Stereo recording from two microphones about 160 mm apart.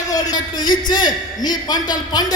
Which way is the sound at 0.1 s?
25° left (ahead or behind).